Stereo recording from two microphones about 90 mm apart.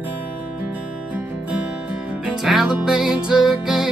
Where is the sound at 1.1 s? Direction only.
15° right (ahead or behind).